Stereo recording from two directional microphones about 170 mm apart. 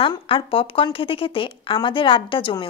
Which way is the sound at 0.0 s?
30° left (ahead or behind).